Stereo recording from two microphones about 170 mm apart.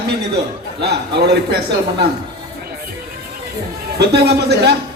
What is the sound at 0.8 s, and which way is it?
Speech, 75° right (ahead or behind).